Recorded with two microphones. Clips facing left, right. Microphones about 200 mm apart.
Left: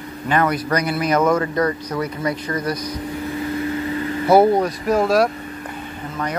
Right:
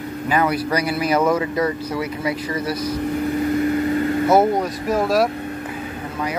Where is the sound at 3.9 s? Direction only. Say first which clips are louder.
Right 4 dB; 45° right (ahead or behind).